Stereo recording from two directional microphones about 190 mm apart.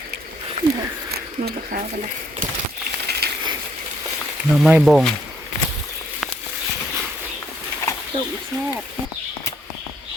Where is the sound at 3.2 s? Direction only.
55° right (ahead or behind).